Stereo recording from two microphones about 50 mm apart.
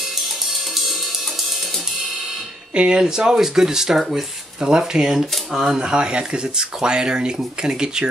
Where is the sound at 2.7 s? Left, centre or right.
Centre.